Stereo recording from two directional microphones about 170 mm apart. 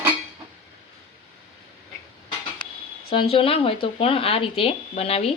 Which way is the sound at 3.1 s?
30° left (ahead or behind).